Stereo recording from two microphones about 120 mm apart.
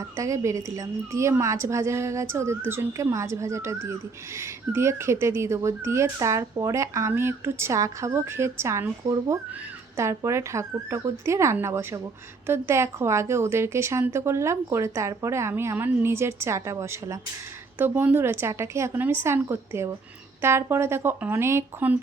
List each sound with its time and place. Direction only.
0.2 s speech: 25° right (ahead or behind)